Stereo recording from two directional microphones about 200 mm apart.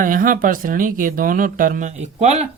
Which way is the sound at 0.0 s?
45° right (ahead or behind).